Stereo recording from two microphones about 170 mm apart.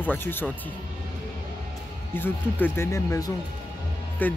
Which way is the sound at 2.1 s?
10° left (ahead or behind).